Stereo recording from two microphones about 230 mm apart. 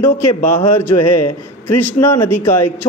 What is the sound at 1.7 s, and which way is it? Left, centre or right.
A man's voice, centre.